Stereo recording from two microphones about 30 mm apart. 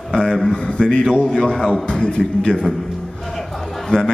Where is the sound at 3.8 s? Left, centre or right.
Left.